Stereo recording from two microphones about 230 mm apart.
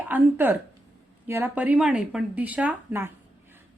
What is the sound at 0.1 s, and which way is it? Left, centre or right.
Speech, centre.